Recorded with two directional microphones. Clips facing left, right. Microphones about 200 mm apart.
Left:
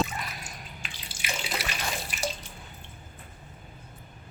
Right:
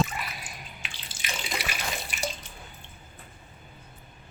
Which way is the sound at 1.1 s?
10° left (ahead or behind).